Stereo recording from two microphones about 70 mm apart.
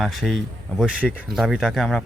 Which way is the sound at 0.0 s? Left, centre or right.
Centre.